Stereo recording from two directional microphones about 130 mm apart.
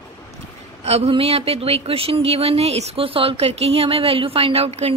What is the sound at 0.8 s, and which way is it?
Speech, 55° right (ahead or behind).